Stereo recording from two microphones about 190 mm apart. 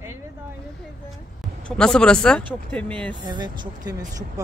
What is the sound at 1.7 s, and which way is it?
Speech, 5° left (ahead or behind).